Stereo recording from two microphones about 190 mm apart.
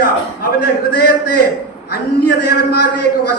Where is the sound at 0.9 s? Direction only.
55° left (ahead or behind).